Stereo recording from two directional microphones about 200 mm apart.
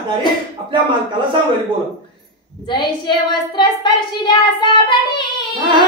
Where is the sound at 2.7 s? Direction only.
20° left (ahead or behind).